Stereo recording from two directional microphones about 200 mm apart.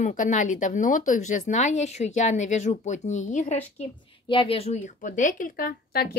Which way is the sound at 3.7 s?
25° left (ahead or behind).